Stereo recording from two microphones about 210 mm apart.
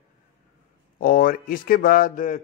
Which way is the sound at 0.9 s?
45° left (ahead or behind).